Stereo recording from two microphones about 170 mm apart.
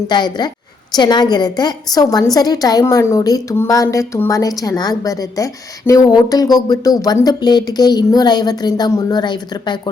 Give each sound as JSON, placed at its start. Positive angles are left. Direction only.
{"t": 0.1, "sound": "a woman's voice", "side_deg": 25}